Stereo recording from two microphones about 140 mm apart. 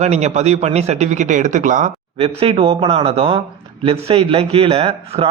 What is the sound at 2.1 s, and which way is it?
A man's voice, 45° right (ahead or behind).